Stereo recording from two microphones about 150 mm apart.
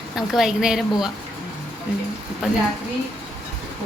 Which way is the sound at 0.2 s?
Centre (ahead or behind).